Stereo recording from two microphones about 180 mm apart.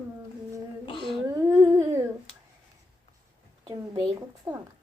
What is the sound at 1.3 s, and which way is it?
Humming, 20° right (ahead or behind).